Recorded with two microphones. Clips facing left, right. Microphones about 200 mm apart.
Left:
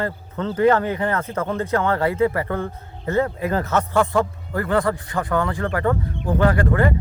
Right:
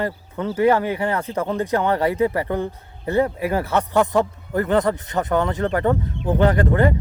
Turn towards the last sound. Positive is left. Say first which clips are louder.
# right 1 dB
turn(degrees=-20)  # may be behind; listen again after turning